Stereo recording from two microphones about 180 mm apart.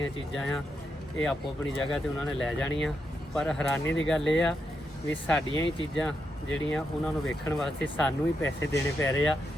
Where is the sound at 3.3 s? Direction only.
5° left (ahead or behind).